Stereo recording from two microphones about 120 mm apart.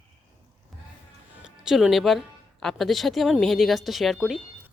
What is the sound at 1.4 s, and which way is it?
Speech, 5° right (ahead or behind).